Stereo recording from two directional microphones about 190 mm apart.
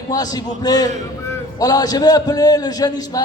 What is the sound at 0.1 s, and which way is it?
A man's voice, 20° left (ahead or behind).